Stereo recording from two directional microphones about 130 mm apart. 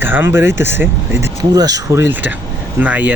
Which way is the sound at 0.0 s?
15° right (ahead or behind).